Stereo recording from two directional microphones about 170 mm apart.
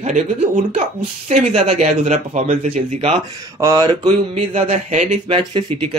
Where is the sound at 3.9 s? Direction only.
30° right (ahead or behind).